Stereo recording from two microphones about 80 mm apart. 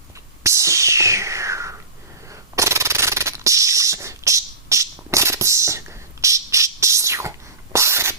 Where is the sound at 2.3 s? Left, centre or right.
Right.